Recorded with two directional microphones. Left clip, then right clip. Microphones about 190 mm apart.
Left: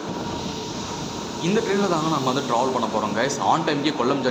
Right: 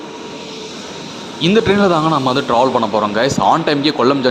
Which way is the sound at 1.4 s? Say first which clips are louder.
Right 10 dB; 45° right (ahead or behind).